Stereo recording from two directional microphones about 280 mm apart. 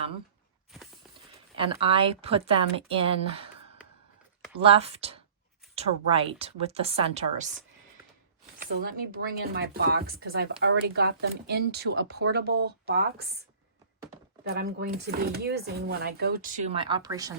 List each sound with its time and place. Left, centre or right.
1.8 s speech: centre
8.5 s speech: right
14.4 s speech: right; by 17.3 s centre